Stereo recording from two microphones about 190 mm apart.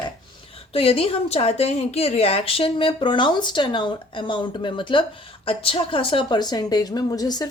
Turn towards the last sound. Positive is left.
turn(degrees=20)  # may be behind; listen again after turning